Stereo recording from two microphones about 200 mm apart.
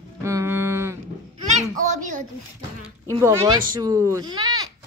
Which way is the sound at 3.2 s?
15° right (ahead or behind).